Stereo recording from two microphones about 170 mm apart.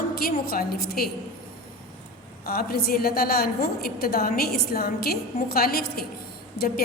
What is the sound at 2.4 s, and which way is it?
A woman's voice, 65° left (ahead or behind).